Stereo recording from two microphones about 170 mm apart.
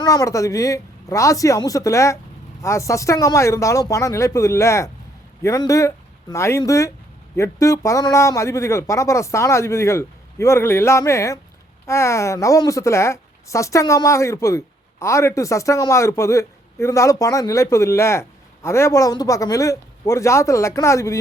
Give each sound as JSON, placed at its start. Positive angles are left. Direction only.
{"t": 0.0, "sound": "speech", "side_deg": 20}